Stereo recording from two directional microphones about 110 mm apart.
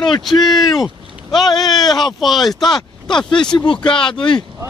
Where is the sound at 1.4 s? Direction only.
40° left (ahead or behind).